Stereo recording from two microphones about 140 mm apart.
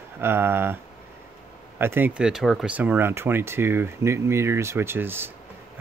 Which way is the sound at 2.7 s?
10° right (ahead or behind).